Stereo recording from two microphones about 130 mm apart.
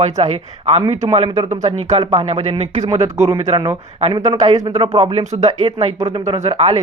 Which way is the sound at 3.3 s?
40° right (ahead or behind).